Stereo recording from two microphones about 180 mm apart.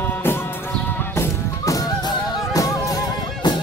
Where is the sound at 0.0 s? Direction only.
10° left (ahead or behind).